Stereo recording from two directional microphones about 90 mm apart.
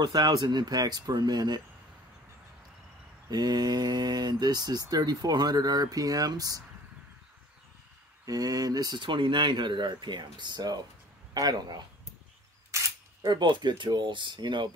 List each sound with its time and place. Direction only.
0.0 s speech: 50° right (ahead or behind)
3.3 s speech: 50° right (ahead or behind)
8.3 s speech: 45° right (ahead or behind); by 14.7 s 60° right (ahead or behind)